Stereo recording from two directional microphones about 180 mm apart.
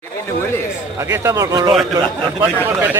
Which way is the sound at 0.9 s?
15° right (ahead or behind).